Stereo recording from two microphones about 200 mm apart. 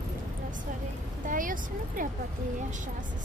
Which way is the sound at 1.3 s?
40° right (ahead or behind).